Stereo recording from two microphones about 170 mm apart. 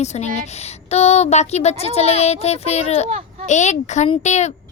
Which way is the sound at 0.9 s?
40° left (ahead or behind).